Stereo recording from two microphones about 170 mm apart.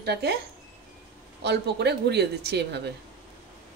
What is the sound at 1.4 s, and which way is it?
A woman's voice, 75° right (ahead or behind).